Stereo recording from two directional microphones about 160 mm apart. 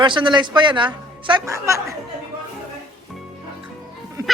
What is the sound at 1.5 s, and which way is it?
Speech, 20° right (ahead or behind).